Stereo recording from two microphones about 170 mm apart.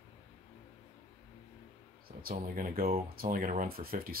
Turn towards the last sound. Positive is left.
turn(degrees=-60)  # may be behind; listen again after turning